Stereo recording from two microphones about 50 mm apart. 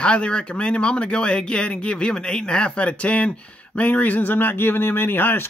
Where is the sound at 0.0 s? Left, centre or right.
Left.